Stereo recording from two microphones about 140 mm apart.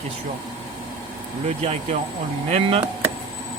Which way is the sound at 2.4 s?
50° right (ahead or behind).